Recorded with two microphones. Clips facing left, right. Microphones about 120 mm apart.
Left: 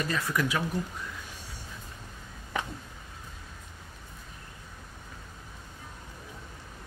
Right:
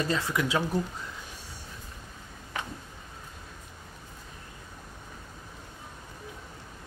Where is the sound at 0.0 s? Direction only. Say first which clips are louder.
Right 1 dB; 25° right (ahead or behind).